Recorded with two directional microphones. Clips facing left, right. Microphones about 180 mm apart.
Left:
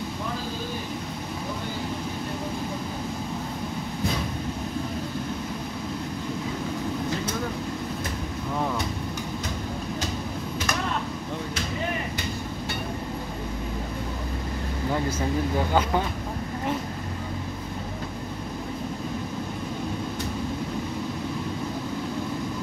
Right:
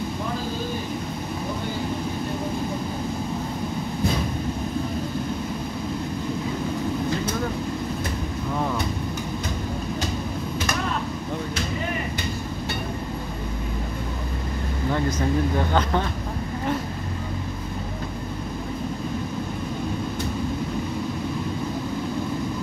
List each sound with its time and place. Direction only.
14.9 s speech: 10° left (ahead or behind)